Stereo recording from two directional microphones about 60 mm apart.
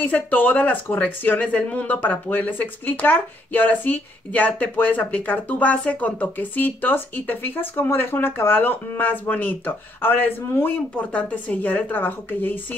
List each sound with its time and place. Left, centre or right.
0.0 s speech: left
11.0 s speech: left